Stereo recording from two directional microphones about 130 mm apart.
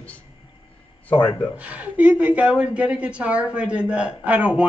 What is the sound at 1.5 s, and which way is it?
A woman's voice, 10° right (ahead or behind).